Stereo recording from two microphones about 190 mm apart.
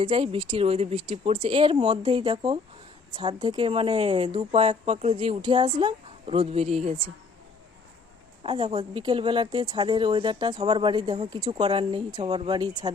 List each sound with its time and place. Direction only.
0.0 s speech: 30° right (ahead or behind)
8.4 s speech: 25° right (ahead or behind)